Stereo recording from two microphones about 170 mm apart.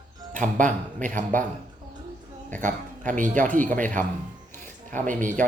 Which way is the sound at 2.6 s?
50° right (ahead or behind).